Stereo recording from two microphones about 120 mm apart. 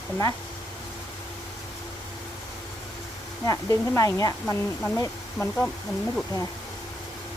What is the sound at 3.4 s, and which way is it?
Speech, 30° left (ahead or behind).